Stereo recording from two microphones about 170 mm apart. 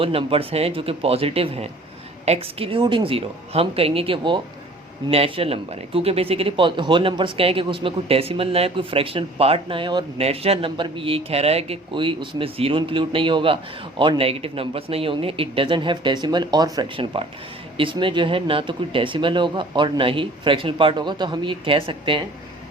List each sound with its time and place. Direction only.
0.0 s a man's voice: 35° right (ahead or behind)